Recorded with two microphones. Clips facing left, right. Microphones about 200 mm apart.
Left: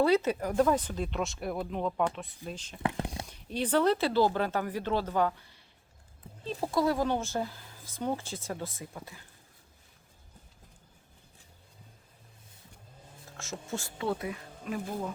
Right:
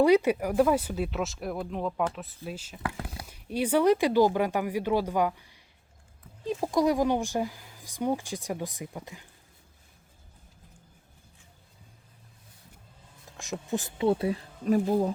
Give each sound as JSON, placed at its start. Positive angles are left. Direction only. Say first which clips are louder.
{"t": 0.0, "sound": "speech", "louder": "right 4 dB", "side_deg": -10}
{"t": 13.3, "sound": "speech", "louder": "right 6 dB", "side_deg": -15}